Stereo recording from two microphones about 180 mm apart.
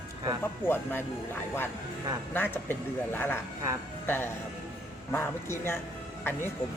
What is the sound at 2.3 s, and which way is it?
Speech, 10° left (ahead or behind).